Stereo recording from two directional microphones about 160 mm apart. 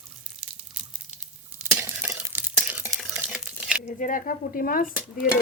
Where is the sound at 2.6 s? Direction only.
10° right (ahead or behind).